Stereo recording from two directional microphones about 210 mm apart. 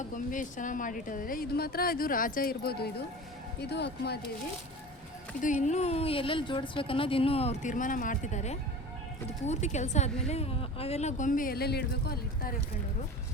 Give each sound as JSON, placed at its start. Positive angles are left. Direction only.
{"t": 0.1, "sound": "speech", "side_deg": 40}
{"t": 5.5, "sound": "speech", "side_deg": 35}